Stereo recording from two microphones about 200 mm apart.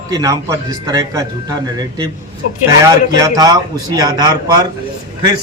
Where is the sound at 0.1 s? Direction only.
15° right (ahead or behind).